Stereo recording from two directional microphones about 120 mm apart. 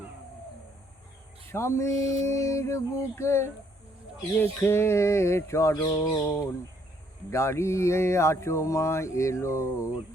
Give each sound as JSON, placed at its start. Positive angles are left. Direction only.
{"t": 1.5, "sound": "speech", "side_deg": 25}